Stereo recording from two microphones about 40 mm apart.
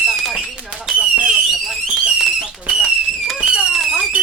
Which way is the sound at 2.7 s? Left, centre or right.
Right.